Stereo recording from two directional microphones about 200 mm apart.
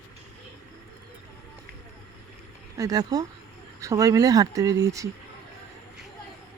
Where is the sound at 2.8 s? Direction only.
20° right (ahead or behind).